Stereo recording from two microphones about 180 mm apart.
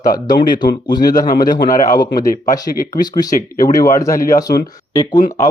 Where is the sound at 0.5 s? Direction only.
50° left (ahead or behind).